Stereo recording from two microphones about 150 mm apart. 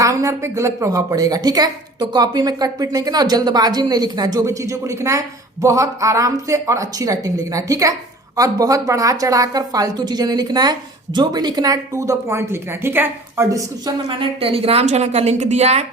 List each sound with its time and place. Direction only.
0.0 s a woman's voice: 20° right (ahead or behind)
14.1 s a woman's voice: 35° right (ahead or behind)